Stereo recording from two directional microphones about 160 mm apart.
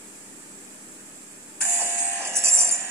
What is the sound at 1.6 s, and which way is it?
Buzzer, 15° right (ahead or behind).